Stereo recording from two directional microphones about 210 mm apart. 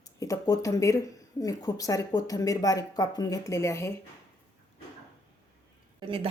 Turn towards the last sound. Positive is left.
turn(degrees=-25)  # may be behind; listen again after turning